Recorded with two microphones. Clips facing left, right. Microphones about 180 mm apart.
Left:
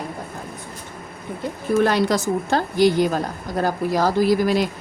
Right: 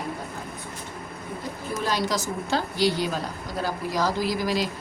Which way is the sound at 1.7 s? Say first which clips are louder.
Left 9 dB; 60° left (ahead or behind).